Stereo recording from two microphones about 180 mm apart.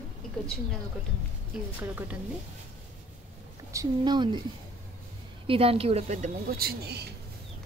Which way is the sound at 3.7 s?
25° right (ahead or behind).